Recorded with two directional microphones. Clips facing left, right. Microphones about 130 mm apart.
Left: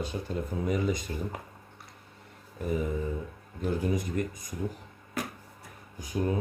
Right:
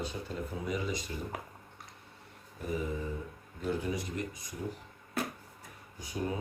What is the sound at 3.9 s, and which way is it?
Speech, 50° left (ahead or behind).